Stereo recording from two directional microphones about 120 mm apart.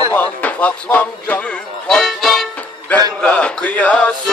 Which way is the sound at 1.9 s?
5° left (ahead or behind).